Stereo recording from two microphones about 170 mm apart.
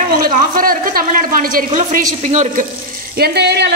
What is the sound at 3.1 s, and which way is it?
Speech, 70° right (ahead or behind).